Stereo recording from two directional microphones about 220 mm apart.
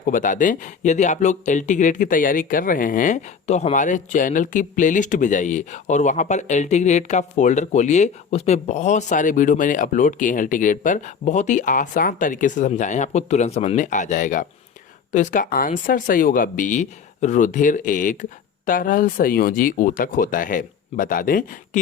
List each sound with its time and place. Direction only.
0.0 s speech: 35° left (ahead or behind)